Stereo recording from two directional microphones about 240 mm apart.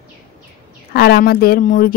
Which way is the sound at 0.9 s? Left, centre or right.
Left.